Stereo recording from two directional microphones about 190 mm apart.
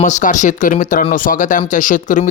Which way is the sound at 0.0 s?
40° left (ahead or behind).